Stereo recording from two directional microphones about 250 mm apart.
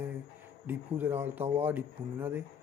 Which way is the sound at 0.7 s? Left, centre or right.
Centre.